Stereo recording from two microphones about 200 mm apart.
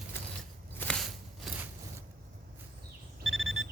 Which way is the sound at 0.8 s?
5° left (ahead or behind).